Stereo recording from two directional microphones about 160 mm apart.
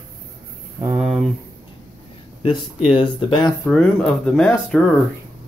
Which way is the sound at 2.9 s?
35° left (ahead or behind).